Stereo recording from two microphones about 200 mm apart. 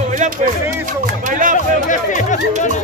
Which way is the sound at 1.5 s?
40° left (ahead or behind).